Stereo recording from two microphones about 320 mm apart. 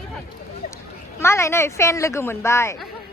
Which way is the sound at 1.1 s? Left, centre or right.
Centre.